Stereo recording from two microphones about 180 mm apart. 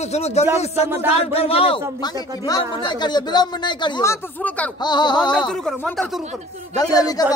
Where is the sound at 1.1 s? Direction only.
35° left (ahead or behind).